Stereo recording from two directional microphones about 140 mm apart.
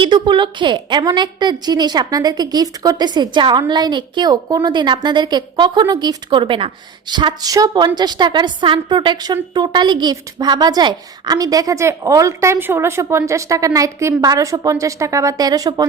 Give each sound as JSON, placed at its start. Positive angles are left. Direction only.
{"t": 0.0, "sound": "a woman's voice", "side_deg": -35}